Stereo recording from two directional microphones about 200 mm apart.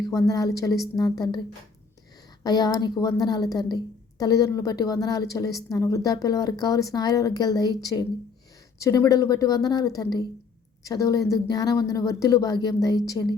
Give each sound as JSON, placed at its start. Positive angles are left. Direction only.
{"t": 0.0, "sound": "speech", "side_deg": 20}
{"t": 2.4, "sound": "speech", "side_deg": 20}